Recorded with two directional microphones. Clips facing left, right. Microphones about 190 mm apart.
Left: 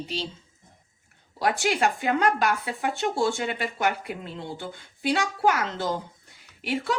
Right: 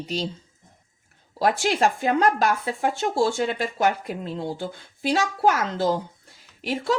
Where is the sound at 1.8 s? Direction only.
35° right (ahead or behind).